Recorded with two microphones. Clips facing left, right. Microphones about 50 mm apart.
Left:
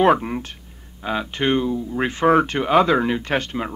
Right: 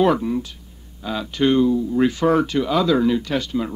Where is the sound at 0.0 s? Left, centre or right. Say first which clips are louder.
Left 1 dB; left.